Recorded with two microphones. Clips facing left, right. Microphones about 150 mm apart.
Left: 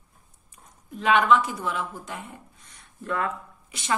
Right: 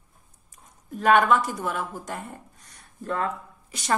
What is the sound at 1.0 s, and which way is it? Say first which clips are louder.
A woman's voice: right 1 dB; 45° right (ahead or behind).